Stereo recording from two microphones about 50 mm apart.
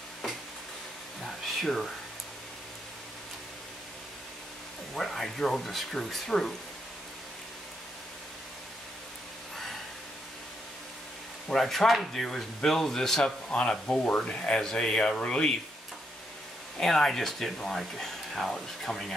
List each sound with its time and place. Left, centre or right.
1.2 s a sound: centre
4.9 s speech: centre
11.5 s speech: centre
16.8 s speech: centre